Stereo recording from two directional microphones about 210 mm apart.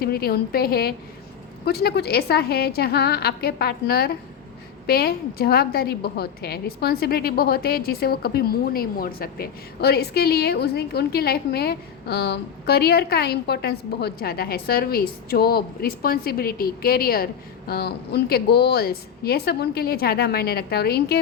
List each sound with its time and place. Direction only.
0.0 s a woman's voice: 45° left (ahead or behind)